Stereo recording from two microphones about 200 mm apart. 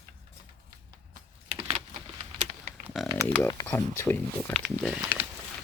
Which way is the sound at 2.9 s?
Centre (ahead or behind).